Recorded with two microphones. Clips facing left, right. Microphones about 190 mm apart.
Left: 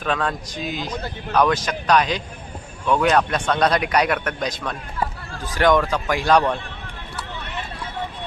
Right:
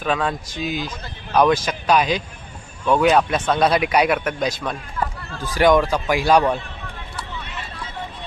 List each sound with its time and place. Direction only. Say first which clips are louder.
0.0 s a man's voice: right 1 dB; 5° right (ahead or behind)